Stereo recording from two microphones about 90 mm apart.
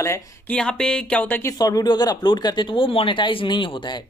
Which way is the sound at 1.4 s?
40° left (ahead or behind).